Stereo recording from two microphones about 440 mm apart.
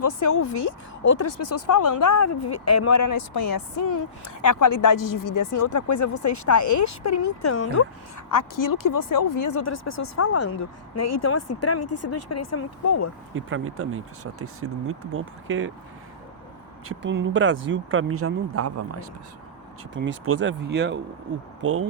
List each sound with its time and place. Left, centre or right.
0.3 s speech: left
1.1 s speech: left
8.3 s speech: left
13.3 s speech: right
16.9 s speech: right